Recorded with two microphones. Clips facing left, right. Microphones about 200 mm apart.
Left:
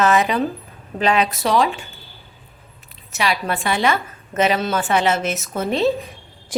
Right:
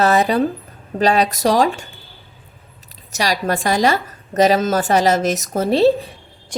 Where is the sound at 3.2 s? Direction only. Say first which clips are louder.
Right 2 dB; 40° right (ahead or behind).